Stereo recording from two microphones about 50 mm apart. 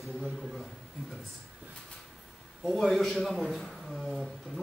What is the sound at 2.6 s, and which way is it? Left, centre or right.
A man's voice, centre.